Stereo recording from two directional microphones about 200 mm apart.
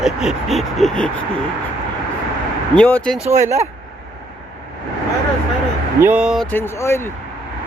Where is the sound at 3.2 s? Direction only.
35° right (ahead or behind).